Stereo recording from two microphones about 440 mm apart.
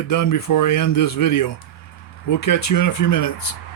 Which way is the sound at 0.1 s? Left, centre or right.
Left.